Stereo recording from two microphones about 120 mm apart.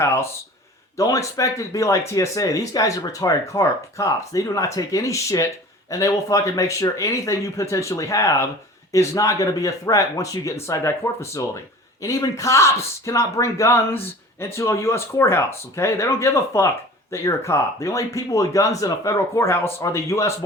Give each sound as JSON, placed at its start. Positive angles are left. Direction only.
{"t": 0.0, "sound": "speech", "side_deg": 20}